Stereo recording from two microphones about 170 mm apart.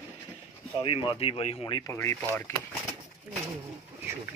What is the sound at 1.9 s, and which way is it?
Speech, 15° left (ahead or behind).